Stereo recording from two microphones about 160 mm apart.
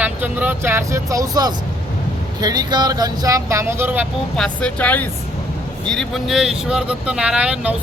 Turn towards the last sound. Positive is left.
turn(degrees=-5)  # may be behind; listen again after turning